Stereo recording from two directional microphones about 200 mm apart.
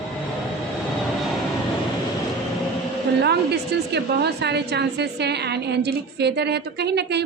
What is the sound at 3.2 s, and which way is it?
A woman's voice, 55° right (ahead or behind).